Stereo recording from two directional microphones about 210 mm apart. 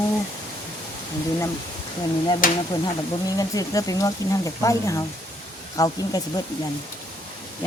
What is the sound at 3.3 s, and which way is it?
Speech, 15° left (ahead or behind).